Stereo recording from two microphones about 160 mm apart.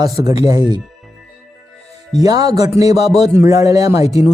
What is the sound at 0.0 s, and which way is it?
Speech, 25° right (ahead or behind).